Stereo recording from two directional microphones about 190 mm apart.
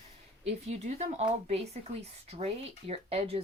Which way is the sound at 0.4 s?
35° right (ahead or behind).